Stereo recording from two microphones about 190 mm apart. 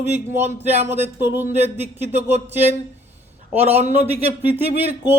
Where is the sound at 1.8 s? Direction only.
35° right (ahead or behind).